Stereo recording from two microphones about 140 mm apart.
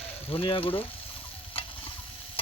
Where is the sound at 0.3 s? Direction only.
40° left (ahead or behind).